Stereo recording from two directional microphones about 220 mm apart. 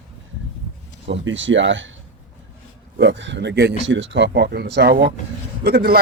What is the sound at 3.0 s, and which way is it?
Speech, 55° right (ahead or behind).